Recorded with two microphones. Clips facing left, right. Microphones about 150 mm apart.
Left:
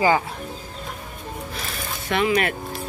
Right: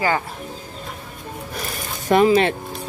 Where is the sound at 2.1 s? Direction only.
40° right (ahead or behind).